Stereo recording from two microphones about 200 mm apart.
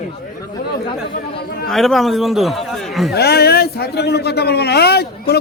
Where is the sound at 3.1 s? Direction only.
55° left (ahead or behind).